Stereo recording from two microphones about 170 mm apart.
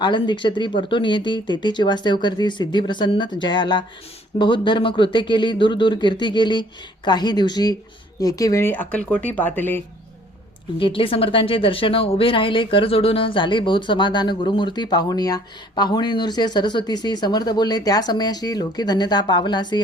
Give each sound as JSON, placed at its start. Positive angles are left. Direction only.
{"t": 0.0, "sound": "speech", "side_deg": 25}
{"t": 10.8, "sound": "speech", "side_deg": 30}